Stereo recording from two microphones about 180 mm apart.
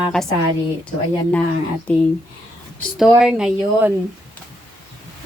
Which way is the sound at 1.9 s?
10° left (ahead or behind).